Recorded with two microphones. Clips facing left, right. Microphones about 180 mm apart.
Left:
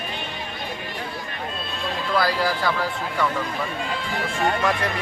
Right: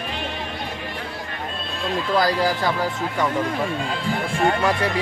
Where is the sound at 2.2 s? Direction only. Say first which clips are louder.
Right 2 dB; 20° right (ahead or behind).